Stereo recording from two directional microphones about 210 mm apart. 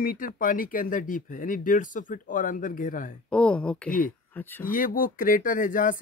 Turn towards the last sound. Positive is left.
turn(degrees=40)  # may be behind; listen again after turning